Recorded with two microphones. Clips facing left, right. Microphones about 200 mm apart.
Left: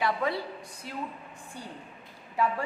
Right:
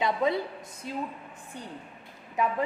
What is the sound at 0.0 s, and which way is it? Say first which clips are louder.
A woman's voice: right 3 dB; 20° right (ahead or behind).